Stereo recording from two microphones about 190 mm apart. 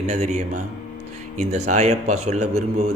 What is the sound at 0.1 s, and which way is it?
Speech, 40° right (ahead or behind).